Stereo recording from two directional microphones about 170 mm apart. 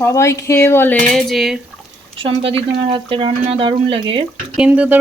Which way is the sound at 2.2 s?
30° right (ahead or behind).